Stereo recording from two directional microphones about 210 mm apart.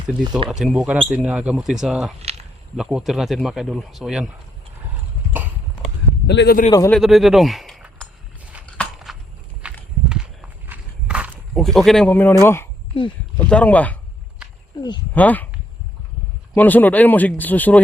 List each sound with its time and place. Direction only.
0.6 s speech: 5° right (ahead or behind)
5.3 s clip-clop: 10° right (ahead or behind)
6.2 s a man's voice: 55° left (ahead or behind)
6.7 s speech: 15° left (ahead or behind)
6.9 s speech: centre (ahead or behind)
8.8 s a sound: centre (ahead or behind)
9.6 s walk: 5° right (ahead or behind); by 12.6 s 10° left (ahead or behind)
12.9 s speech: 25° left (ahead or behind)
13.4 s speech: 5° left (ahead or behind)
15.1 s speech: 10° left (ahead or behind)
16.6 s speech: 10° left (ahead or behind)